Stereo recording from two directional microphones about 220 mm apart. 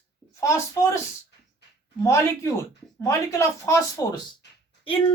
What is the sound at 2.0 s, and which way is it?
Speech, 15° left (ahead or behind).